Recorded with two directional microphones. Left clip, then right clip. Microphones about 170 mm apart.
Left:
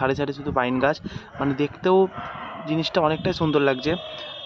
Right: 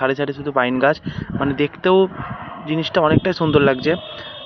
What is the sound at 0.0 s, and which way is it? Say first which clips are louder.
Speech: right 4 dB; 5° right (ahead or behind).